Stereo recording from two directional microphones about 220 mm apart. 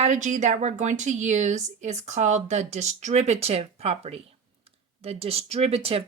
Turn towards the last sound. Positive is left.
turn(degrees=-25)  # may be behind; listen again after turning